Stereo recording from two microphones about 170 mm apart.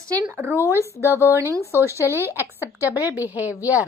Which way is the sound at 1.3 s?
15° right (ahead or behind).